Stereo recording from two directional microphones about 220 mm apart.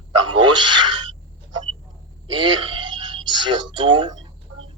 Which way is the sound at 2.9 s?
20° right (ahead or behind).